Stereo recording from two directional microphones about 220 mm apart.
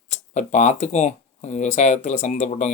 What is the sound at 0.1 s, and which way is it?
Speech, 35° left (ahead or behind).